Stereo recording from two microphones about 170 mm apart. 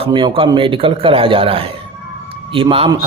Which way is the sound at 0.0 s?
25° right (ahead or behind).